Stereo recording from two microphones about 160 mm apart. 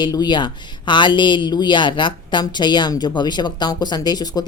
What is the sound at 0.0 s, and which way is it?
Speech, 25° left (ahead or behind).